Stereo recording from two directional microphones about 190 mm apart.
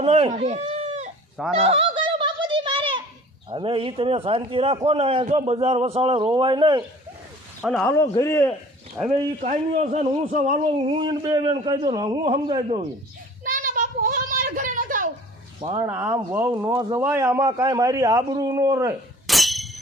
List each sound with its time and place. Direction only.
0.0 s speech: 35° right (ahead or behind)
1.5 s a sound: 30° right (ahead or behind)
3.5 s a man's voice: 25° right (ahead or behind)
7.7 s a man's voice: 10° left (ahead or behind)
9.0 s a man's voice: 15° right (ahead or behind)
9.4 s a man's voice: 35° right (ahead or behind)
10.9 s a man's voice: 25° right (ahead or behind)
13.4 s a sound: 45° right (ahead or behind)
15.6 s a man's voice: 25° right (ahead or behind)
15.9 s a man's voice: 10° right (ahead or behind)
19.3 s a sound: centre (ahead or behind)